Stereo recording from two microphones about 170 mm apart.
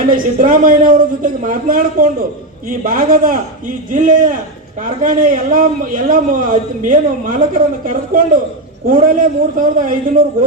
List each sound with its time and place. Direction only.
0.1 s a man's voice: 55° right (ahead or behind)